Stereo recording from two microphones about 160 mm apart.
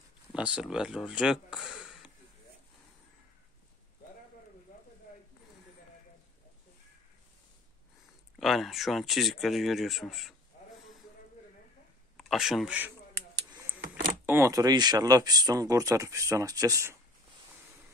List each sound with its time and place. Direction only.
0.3 s speech: 5° right (ahead or behind)
8.4 s speech: centre (ahead or behind)
12.2 s speech: centre (ahead or behind)
14.2 s speech: 15° right (ahead or behind)